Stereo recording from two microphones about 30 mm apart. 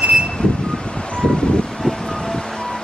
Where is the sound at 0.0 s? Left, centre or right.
Right.